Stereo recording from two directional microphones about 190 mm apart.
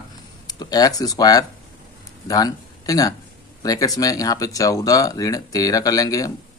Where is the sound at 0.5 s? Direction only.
20° left (ahead or behind).